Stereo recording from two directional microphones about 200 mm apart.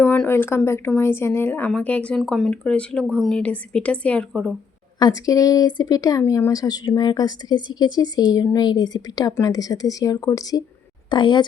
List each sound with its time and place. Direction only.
0.0 s speech: 10° left (ahead or behind)
4.9 s speech: 20° left (ahead or behind)